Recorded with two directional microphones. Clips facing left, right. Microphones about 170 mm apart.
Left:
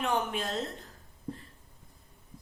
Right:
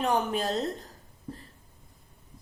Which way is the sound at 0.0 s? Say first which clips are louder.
Right 4 dB; 35° right (ahead or behind).